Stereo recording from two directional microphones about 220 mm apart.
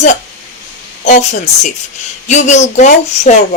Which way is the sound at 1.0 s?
30° left (ahead or behind).